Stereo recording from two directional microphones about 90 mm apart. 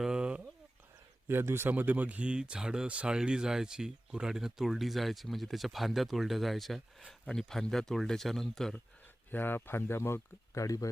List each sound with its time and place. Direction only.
0.0 s a sound: 10° right (ahead or behind)
1.3 s speech: 25° right (ahead or behind); by 8.7 s 5° left (ahead or behind)
9.3 s speech: 25° left (ahead or behind); by 10.8 s 40° left (ahead or behind)